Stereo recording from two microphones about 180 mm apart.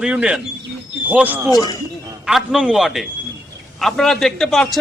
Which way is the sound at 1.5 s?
25° left (ahead or behind).